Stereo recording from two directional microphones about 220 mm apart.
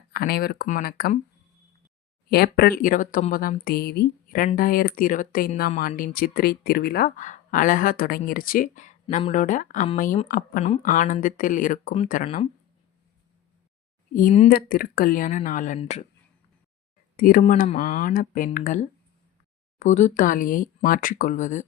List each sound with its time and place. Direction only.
0.1 s speech: 45° left (ahead or behind)
2.3 s speech: 45° left (ahead or behind); by 12.5 s 30° left (ahead or behind)
14.1 s speech: 35° left (ahead or behind)
17.2 s speech: 40° left (ahead or behind)